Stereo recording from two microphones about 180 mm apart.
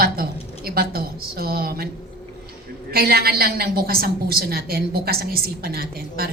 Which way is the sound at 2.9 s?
60° right (ahead or behind).